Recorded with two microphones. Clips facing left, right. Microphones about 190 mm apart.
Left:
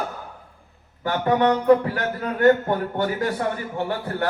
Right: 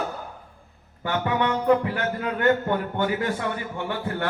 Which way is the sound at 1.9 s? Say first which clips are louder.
Left 1 dB; 40° left (ahead or behind).